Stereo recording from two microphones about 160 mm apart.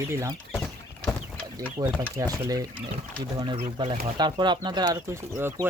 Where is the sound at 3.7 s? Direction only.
30° right (ahead or behind).